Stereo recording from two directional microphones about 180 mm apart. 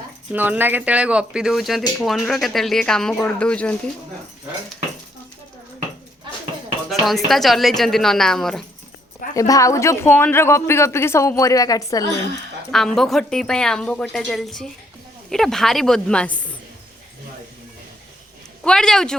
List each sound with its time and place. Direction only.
0.3 s a woman's voice: 10° right (ahead or behind); by 3.8 s 5° left (ahead or behind)
7.0 s a woman's voice: centre (ahead or behind)
9.3 s speech: 20° left (ahead or behind)
12.7 s a woman's voice: centre (ahead or behind)
18.6 s a woman's voice: 5° left (ahead or behind)